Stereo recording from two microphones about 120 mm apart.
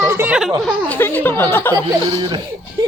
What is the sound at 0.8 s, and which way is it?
Speech, 15° left (ahead or behind).